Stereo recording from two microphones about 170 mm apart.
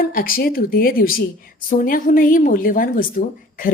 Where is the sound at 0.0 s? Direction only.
55° left (ahead or behind).